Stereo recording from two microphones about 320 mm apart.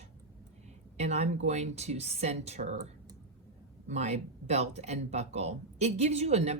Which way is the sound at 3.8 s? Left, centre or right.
Right.